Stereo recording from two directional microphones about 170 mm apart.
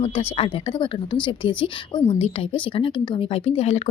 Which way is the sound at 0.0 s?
35° left (ahead or behind).